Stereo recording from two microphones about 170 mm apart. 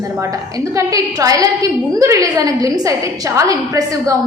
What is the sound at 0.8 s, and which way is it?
A woman's voice, 20° right (ahead or behind).